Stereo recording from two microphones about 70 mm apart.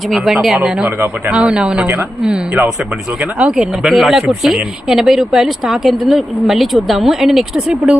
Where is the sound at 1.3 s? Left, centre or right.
Centre.